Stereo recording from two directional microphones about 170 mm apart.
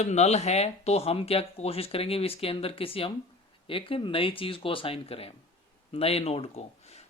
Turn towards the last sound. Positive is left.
turn(degrees=40)  # may be behind; listen again after turning